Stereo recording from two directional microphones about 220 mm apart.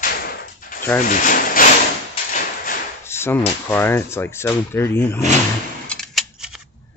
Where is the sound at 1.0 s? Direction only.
40° left (ahead or behind).